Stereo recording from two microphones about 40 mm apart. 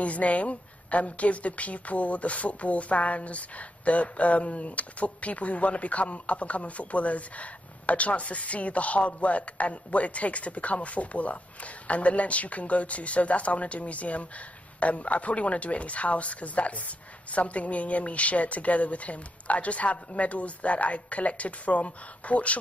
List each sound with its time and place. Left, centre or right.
0.0 s a woman's voice: left